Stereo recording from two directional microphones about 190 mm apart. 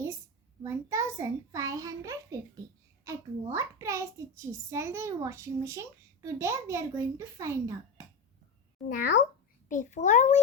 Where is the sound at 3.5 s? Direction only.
15° right (ahead or behind).